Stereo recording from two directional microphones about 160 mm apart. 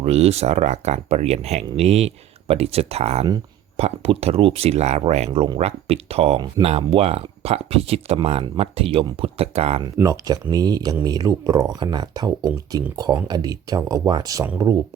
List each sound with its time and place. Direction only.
0.0 s speech: 40° right (ahead or behind)
9.8 s speech: 25° right (ahead or behind)